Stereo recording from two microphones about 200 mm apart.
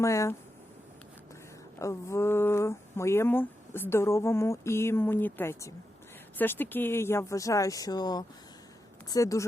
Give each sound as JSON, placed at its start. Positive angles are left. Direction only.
{"t": 0.0, "sound": "speech", "side_deg": 15}
{"t": 1.8, "sound": "speech", "side_deg": 15}